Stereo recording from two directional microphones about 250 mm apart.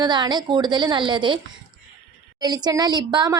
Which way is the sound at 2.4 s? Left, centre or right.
Centre.